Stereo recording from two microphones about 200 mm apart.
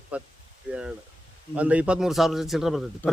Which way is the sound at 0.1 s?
5° right (ahead or behind).